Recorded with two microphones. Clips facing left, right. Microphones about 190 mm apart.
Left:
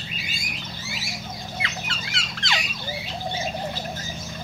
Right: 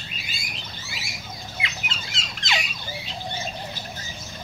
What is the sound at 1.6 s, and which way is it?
Fowl, 20° right (ahead or behind).